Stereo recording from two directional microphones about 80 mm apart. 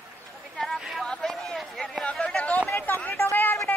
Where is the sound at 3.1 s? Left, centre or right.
Left.